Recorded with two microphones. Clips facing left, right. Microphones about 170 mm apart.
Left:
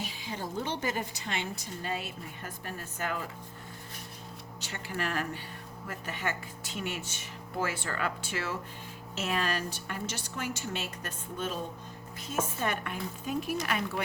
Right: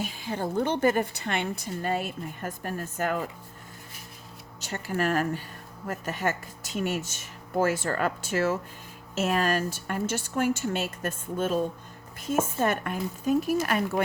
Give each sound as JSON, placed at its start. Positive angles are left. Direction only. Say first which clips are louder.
{"t": 0.0, "sound": "a woman's voice", "louder": "right 7 dB", "side_deg": -50}
{"t": 4.6, "sound": "a woman's voice", "louder": "right 8 dB", "side_deg": -45}